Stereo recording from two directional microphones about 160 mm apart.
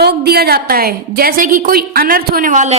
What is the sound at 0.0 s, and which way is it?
A woman's voice, 85° right.